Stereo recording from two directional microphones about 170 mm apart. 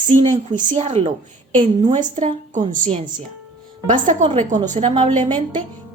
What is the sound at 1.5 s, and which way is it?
Speech, 25° right (ahead or behind).